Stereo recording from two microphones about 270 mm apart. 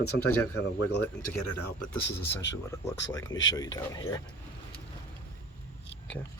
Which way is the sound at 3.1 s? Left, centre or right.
Centre.